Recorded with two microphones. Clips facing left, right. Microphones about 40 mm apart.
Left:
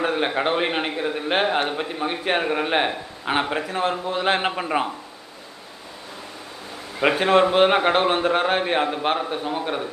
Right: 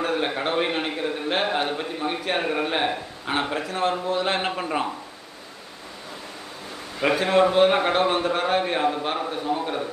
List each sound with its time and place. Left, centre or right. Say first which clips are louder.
0.0 s a man's voice: left 3 dB; left
7.0 s a man's voice: left 2 dB; left